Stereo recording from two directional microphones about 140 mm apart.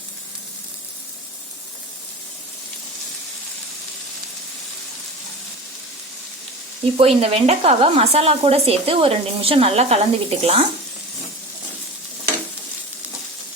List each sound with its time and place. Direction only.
6.9 s speech: 45° right (ahead or behind)